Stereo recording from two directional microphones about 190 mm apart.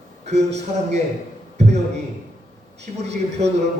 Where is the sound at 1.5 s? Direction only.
35° right (ahead or behind).